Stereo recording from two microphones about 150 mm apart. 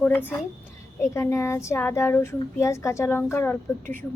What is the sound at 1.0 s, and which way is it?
Speech, 20° left (ahead or behind).